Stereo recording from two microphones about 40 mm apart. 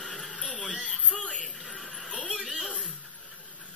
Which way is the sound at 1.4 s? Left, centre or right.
Centre.